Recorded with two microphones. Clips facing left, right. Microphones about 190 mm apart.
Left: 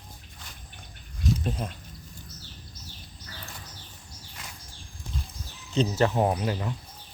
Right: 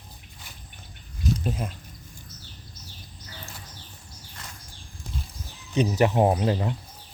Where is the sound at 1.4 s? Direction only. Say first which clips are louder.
Right 2 dB; 5° right (ahead or behind).